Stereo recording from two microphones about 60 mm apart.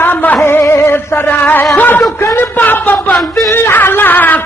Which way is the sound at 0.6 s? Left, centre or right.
Left.